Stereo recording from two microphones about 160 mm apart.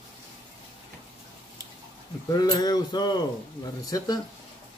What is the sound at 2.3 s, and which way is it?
Speech, 25° left (ahead or behind).